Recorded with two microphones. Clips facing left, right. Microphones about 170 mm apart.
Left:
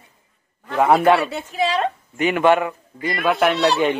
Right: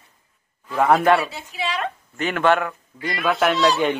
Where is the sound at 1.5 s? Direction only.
35° left (ahead or behind).